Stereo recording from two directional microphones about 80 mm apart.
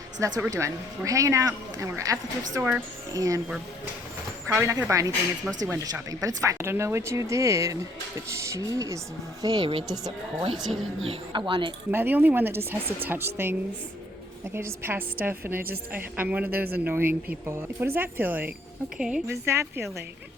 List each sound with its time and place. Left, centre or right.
0.2 s speech: right
4.5 s speech: right
9.4 s speech: right
10.7 s a woman's voice: centre
11.3 s speech: right
11.9 s a woman's voice: right
18.9 s a woman's voice: centre
19.3 s speech: right